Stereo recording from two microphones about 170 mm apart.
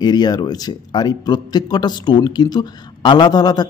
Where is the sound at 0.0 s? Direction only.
25° left (ahead or behind).